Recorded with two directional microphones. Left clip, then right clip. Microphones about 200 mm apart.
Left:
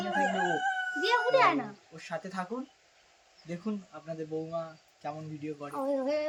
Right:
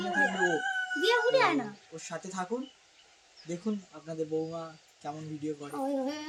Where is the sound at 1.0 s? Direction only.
50° right (ahead or behind).